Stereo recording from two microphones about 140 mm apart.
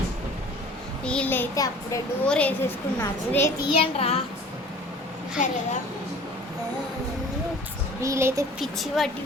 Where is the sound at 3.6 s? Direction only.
45° left (ahead or behind).